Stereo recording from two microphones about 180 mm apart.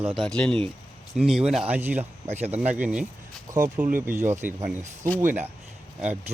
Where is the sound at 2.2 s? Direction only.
35° right (ahead or behind).